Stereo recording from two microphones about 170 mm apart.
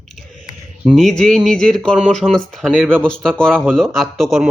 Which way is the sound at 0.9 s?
Centre (ahead or behind).